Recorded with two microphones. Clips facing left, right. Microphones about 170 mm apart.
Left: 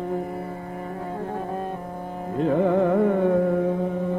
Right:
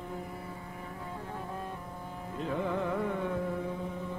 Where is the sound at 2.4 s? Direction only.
60° left (ahead or behind).